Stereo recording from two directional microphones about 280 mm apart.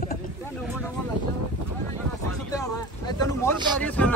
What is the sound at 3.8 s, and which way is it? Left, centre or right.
Speech, centre.